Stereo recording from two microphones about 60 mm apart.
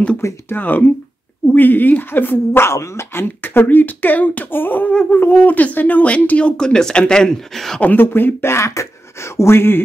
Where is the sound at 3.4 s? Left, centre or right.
Left; by 7.8 s centre.